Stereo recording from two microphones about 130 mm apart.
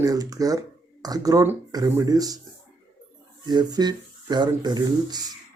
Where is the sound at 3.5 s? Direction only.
35° right (ahead or behind).